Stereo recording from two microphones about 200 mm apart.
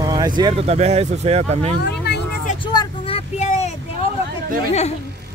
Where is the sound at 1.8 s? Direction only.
55° left (ahead or behind).